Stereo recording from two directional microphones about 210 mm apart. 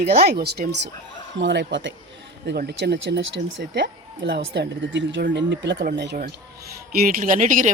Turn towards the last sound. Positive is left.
turn(degrees=-40)  # may be behind; listen again after turning